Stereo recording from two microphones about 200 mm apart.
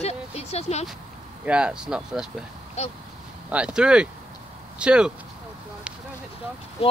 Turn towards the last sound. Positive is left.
turn(degrees=30)  # may be behind; listen again after turning